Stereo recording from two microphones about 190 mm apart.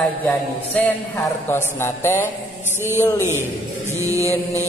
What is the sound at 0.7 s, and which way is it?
Music, 10° left (ahead or behind).